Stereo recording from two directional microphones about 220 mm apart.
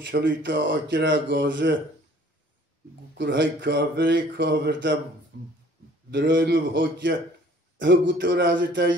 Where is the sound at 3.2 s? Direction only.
55° right (ahead or behind).